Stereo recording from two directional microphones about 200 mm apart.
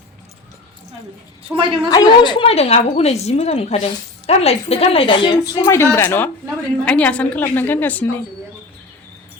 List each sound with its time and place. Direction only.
1.5 s a woman's voice: 25° right (ahead or behind)
1.9 s a woman's voice: 20° left (ahead or behind)
5.6 s a woman's voice: 15° left (ahead or behind)